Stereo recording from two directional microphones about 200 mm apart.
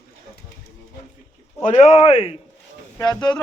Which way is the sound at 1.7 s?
35° left (ahead or behind).